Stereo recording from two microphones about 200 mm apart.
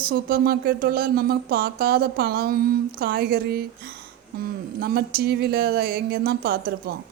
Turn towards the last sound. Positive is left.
turn(degrees=-50)  # may be behind; listen again after turning